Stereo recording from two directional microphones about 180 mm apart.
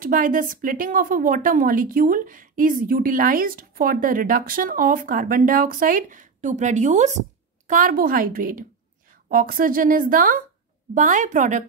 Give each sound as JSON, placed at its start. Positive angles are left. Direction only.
{"t": 0.0, "sound": "a woman's voice", "side_deg": -50}